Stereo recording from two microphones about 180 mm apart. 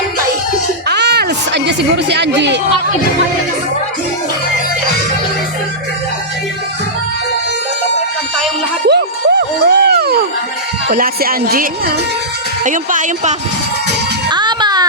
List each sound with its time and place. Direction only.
0.9 s a sound: 65° right (ahead or behind)
8.9 s music: 65° right (ahead or behind)
10.8 s speech: 55° right (ahead or behind)
14.3 s music: 25° right (ahead or behind)